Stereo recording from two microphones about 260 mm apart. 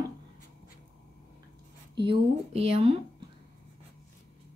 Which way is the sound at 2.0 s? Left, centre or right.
Right.